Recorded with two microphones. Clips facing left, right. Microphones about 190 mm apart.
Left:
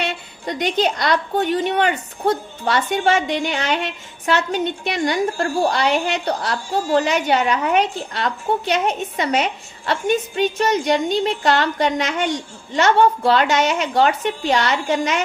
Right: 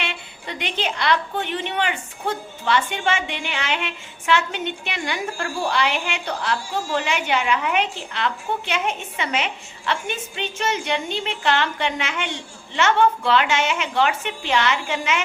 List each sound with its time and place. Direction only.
0.0 s a woman's voice: 40° left (ahead or behind)